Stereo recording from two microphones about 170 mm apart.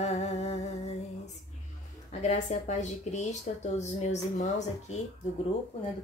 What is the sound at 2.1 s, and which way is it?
Speech, 40° left (ahead or behind).